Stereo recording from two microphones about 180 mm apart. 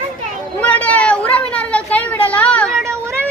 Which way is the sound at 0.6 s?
10° left (ahead or behind).